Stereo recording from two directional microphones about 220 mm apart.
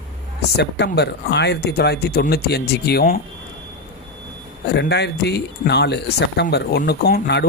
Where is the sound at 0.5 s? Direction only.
50° left (ahead or behind).